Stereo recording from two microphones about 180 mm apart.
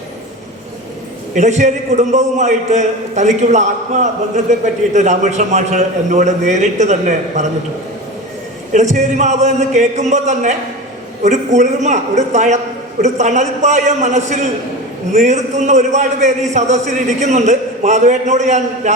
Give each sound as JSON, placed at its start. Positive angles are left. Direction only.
{"t": 1.4, "sound": "a man's voice", "side_deg": -40}
{"t": 8.7, "sound": "a man's voice", "side_deg": -40}